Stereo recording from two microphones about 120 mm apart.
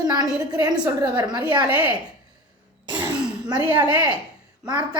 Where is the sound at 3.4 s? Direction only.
35° right (ahead or behind).